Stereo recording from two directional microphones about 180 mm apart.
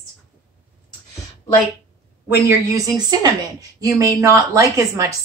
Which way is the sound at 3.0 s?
25° right (ahead or behind).